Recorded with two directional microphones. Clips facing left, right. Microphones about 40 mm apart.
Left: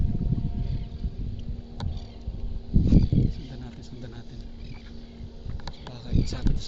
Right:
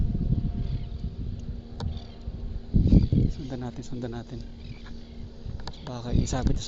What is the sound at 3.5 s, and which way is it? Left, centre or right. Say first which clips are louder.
Speech: right 6 dB; right.